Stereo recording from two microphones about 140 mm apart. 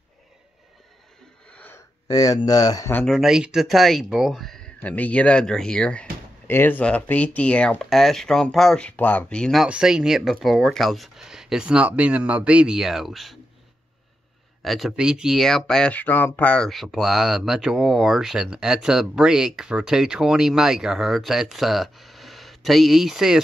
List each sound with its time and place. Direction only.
1.5 s a sound: 10° left (ahead or behind)
2.0 s speech: 25° left (ahead or behind)
2.9 s speech: 10° left (ahead or behind)
3.2 s speech: 5° right (ahead or behind)
14.6 s speech: centre (ahead or behind)